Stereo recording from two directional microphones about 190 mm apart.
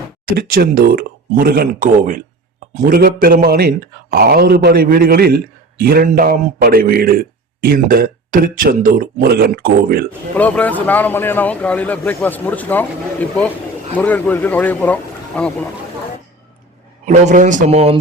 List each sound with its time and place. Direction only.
0.3 s a man's voice: 50° right (ahead or behind)
10.3 s speech: 10° left (ahead or behind)
17.1 s speech: 40° right (ahead or behind)